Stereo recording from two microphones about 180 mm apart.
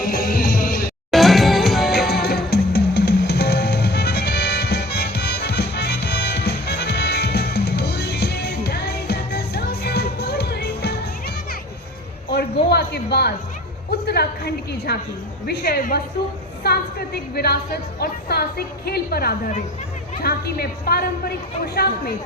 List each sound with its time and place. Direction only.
0.0 s music: 55° left (ahead or behind)
1.1 s music: centre (ahead or behind)
2.0 s music: 65° left (ahead or behind)
12.7 s a sound: 65° left (ahead or behind)
15.4 s a woman's voice: 55° left (ahead or behind)